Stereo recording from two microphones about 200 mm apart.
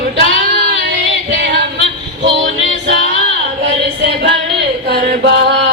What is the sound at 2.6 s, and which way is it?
Music, 65° right (ahead or behind).